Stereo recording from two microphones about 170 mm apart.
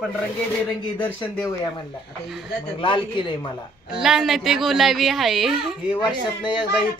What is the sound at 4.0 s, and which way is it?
A woman's voice, centre (ahead or behind).